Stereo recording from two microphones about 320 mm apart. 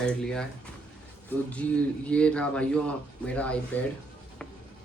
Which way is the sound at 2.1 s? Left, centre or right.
Centre.